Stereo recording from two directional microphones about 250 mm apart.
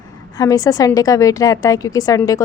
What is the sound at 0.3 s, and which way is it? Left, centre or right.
A woman's voice, centre.